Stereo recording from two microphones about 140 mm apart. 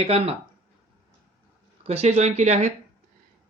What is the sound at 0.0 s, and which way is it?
Speech, 45° right (ahead or behind).